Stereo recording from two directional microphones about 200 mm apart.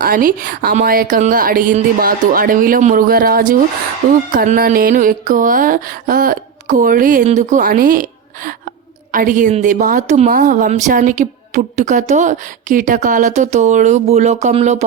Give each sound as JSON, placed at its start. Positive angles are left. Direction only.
{"t": 0.0, "sound": "a woman's voice", "side_deg": -45}